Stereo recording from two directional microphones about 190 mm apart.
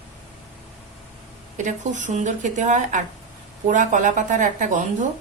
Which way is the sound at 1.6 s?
40° right (ahead or behind).